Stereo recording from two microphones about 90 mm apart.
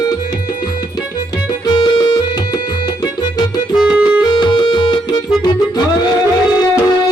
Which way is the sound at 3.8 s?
10° right (ahead or behind).